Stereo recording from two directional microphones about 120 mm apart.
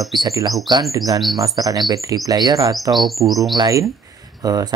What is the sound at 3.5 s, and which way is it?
Speech, 30° right (ahead or behind).